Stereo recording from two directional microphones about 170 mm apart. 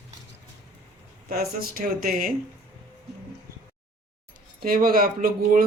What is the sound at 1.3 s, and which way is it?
Speech, 65° right (ahead or behind).